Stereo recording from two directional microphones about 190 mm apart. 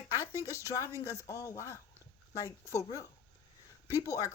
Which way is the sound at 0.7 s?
15° left (ahead or behind).